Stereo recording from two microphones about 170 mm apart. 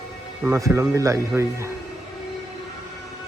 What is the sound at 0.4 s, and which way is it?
Speech, 15° right (ahead or behind).